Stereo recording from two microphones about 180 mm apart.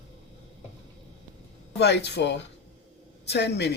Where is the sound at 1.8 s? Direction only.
70° left (ahead or behind).